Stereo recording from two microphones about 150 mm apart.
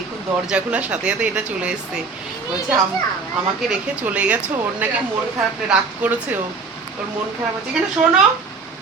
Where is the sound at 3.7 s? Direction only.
10° right (ahead or behind).